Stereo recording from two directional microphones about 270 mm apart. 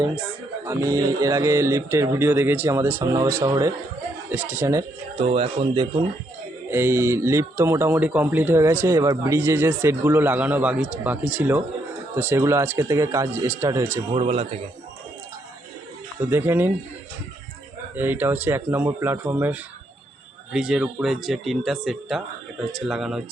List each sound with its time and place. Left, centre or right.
0.6 s speech: centre
6.7 s speech: centre
16.2 s speech: centre
17.9 s speech: centre